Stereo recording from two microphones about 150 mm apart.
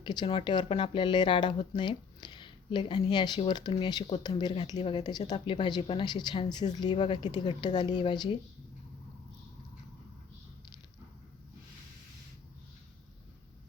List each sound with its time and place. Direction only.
0.0 s speech: 30° left (ahead or behind)